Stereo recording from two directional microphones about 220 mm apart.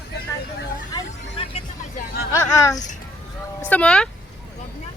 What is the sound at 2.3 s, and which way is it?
Speech, 15° left (ahead or behind).